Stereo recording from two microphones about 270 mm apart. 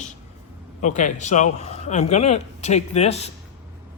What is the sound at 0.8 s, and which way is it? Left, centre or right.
A man's voice, left.